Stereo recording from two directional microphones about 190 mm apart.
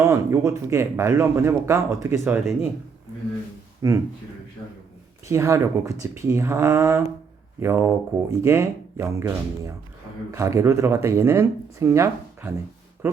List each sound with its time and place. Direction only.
0.0 s speech: 15° right (ahead or behind)
3.8 s speech: 15° right (ahead or behind)
5.3 s speech: 15° right (ahead or behind)